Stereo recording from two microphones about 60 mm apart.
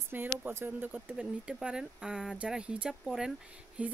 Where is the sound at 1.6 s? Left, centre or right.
Centre.